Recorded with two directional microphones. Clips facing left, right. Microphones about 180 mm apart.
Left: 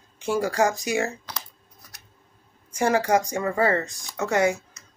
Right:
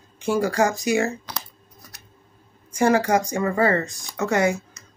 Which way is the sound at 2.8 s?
25° left (ahead or behind).